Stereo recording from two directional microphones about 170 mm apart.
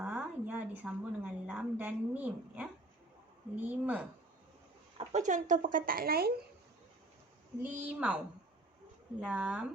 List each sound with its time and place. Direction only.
0.0 s a woman's voice: 10° right (ahead or behind)
4.9 s speech: 45° right (ahead or behind); by 6.3 s 65° right (ahead or behind)
7.6 s a woman's voice: 10° right (ahead or behind)
9.2 s a woman's voice: 5° right (ahead or behind)